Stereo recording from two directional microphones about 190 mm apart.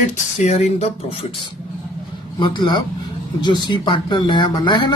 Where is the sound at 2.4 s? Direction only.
25° left (ahead or behind).